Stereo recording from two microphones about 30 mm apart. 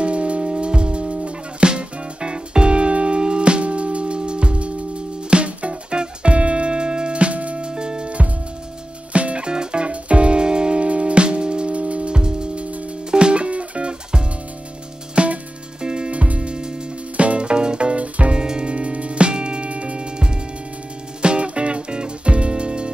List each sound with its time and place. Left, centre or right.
0.0 s music: right
7.5 s music: right
9.1 s music: right
9.5 s music: right
15.8 s music: right
16.1 s music: right
18.3 s music: right